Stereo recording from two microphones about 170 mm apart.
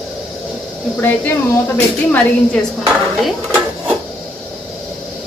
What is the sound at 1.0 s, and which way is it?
Speech, 10° left (ahead or behind).